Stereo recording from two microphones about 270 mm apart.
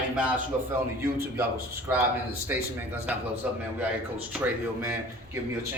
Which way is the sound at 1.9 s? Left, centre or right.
Centre.